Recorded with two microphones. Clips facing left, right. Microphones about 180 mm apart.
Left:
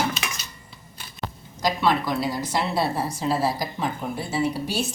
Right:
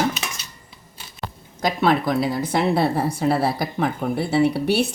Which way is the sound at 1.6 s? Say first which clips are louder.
Right 3 dB; 55° right (ahead or behind).